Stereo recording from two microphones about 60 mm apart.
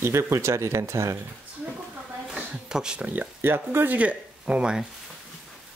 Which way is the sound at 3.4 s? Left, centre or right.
Right.